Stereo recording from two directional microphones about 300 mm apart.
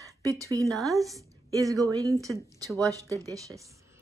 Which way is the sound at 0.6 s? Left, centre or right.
Centre.